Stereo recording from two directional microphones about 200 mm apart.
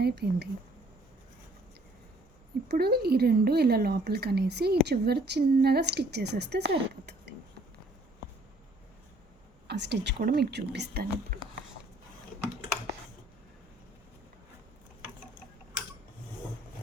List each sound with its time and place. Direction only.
0.0 s speech: 55° right (ahead or behind)
2.6 s speech: 50° right (ahead or behind)
9.6 s speech: 60° right (ahead or behind)